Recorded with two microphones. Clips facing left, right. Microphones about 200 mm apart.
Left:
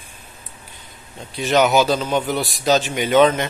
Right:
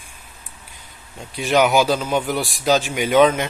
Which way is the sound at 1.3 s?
10° right (ahead or behind).